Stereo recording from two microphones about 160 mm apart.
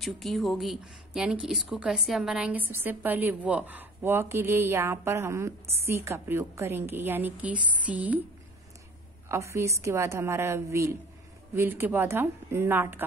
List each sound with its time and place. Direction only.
0.0 s speech: centre (ahead or behind)
9.3 s speech: 15° right (ahead or behind)